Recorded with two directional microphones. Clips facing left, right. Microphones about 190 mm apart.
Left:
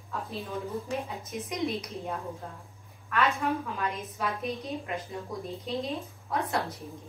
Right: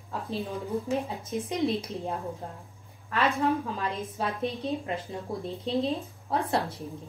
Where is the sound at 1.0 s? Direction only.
30° right (ahead or behind).